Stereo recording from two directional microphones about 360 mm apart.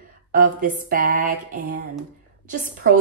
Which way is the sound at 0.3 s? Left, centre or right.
Right.